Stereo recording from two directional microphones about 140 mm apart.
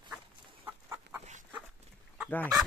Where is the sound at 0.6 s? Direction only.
15° right (ahead or behind).